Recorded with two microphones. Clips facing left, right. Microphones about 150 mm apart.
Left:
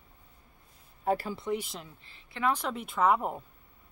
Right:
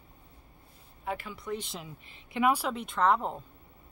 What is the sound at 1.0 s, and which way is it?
Speech, 35° left (ahead or behind).